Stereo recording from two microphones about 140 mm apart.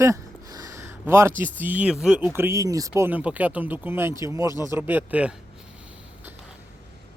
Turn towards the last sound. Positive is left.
turn(degrees=-10)  # may be behind; listen again after turning